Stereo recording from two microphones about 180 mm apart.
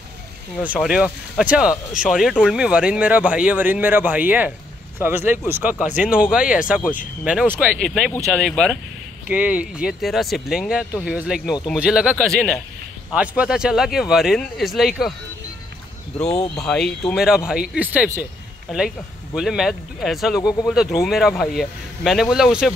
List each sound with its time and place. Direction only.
0.7 s speech: 5° right (ahead or behind)
7.7 s speech: 5° left (ahead or behind)
9.3 s speech: 5° right (ahead or behind)
12.2 s speech: 5° left (ahead or behind)
13.1 s speech: 10° right (ahead or behind)
16.2 s speech: 35° left (ahead or behind)
16.5 s speech: 5° left (ahead or behind)